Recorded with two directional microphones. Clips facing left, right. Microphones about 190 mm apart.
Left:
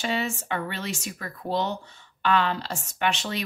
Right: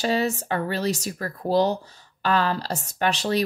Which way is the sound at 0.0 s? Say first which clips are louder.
Right 5 dB; 35° right (ahead or behind).